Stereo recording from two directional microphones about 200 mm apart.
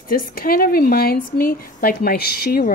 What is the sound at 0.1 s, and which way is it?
A woman's voice, 50° left (ahead or behind).